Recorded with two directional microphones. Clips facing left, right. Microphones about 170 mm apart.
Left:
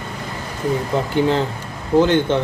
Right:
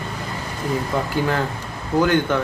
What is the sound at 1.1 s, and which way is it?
Speech, 25° left (ahead or behind).